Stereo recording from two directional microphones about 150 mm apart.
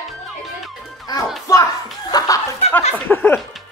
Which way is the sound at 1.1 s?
25° left (ahead or behind).